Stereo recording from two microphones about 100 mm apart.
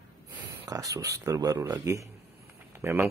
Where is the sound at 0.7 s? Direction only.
35° right (ahead or behind).